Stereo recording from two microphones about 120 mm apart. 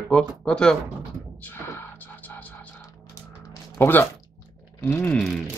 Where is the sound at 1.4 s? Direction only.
15° left (ahead or behind).